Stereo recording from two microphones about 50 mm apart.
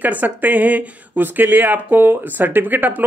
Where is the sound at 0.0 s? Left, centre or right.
Right.